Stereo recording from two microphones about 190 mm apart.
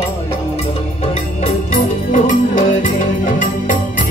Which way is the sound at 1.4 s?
40° left (ahead or behind).